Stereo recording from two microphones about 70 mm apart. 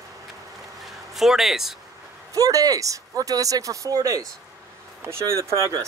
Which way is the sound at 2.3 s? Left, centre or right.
Right.